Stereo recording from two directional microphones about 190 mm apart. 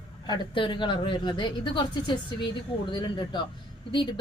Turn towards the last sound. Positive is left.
turn(degrees=25)  # may be behind; listen again after turning